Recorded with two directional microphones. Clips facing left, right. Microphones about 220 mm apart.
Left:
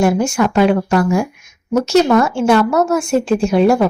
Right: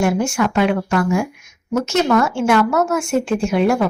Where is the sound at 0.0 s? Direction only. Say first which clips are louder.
Left 3 dB; 35° left (ahead or behind).